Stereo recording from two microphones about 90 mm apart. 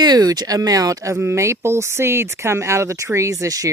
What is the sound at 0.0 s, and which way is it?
Speech, 45° right (ahead or behind).